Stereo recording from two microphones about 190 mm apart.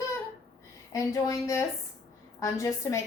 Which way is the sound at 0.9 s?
15° left (ahead or behind).